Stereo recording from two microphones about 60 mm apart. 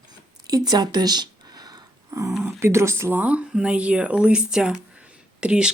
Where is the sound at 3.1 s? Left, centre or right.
Right.